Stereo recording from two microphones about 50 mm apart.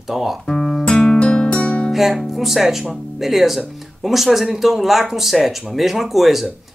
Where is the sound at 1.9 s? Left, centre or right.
Centre.